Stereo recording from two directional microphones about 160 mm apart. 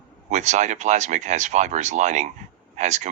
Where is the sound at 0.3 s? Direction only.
45° right (ahead or behind).